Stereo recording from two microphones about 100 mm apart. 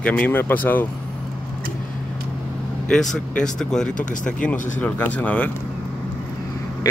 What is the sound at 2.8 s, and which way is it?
Speech, 10° left (ahead or behind).